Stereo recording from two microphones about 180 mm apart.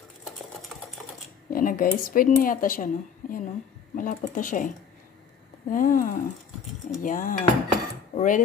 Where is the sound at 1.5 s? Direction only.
50° left (ahead or behind).